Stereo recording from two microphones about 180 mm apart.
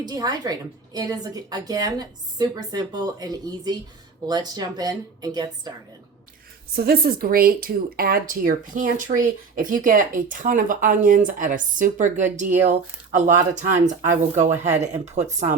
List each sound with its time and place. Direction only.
0.0 s a woman's voice: 20° right (ahead or behind)
6.7 s speech: 60° right (ahead or behind); by 15.5 s 40° right (ahead or behind)